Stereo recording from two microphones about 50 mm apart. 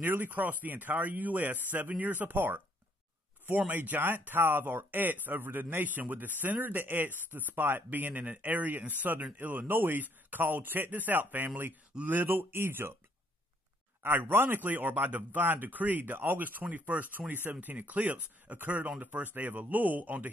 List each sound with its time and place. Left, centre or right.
0.0 s speech: right
12.3 s speech: right
14.3 s speech: right